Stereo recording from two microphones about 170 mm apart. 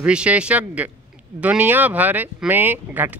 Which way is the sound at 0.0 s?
5° right (ahead or behind).